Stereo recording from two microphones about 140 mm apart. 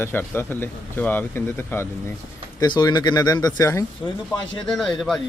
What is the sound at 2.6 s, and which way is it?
Speech, 30° left (ahead or behind).